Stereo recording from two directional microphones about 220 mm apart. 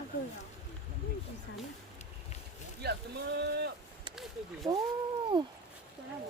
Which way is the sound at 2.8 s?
50° right (ahead or behind).